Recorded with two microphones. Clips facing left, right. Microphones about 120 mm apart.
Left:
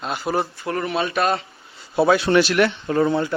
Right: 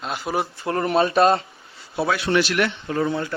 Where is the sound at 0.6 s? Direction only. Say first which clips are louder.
Right 3 dB; 25° right (ahead or behind).